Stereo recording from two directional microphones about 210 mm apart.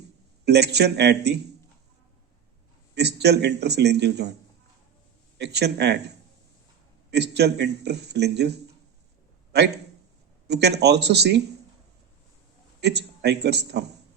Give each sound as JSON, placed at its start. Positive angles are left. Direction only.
{"t": 0.4, "sound": "speech", "side_deg": -50}
{"t": 2.9, "sound": "speech", "side_deg": -55}
{"t": 5.4, "sound": "speech", "side_deg": -50}
{"t": 7.1, "sound": "a man's voice", "side_deg": -50}
{"t": 12.8, "sound": "speech", "side_deg": -50}